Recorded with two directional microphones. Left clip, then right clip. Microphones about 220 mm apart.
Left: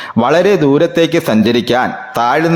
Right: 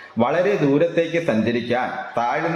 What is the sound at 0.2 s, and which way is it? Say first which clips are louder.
A man's voice: left 8 dB; 50° left (ahead or behind).